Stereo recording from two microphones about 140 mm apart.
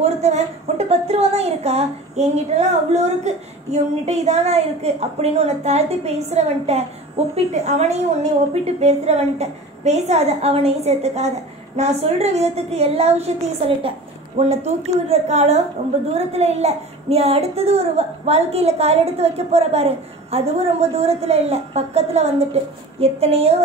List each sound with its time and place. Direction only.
0.0 s a child's voice: 50° right (ahead or behind)